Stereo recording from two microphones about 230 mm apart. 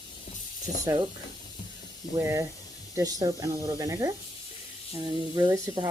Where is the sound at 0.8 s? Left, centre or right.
Centre.